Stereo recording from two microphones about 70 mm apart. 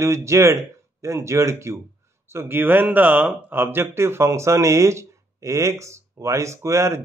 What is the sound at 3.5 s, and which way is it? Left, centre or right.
Speech, right.